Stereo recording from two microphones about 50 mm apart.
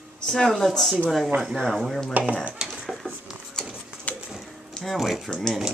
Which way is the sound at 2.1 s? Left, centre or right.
Right.